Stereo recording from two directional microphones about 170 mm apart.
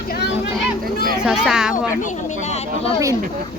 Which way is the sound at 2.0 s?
45° left (ahead or behind).